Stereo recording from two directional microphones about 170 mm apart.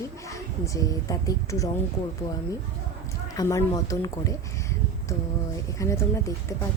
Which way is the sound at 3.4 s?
20° left (ahead or behind).